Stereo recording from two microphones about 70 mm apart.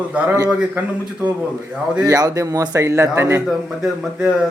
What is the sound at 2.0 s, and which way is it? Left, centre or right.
Speech, right.